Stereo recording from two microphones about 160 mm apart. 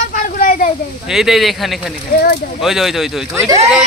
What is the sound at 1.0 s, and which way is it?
Speech, 5° right (ahead or behind).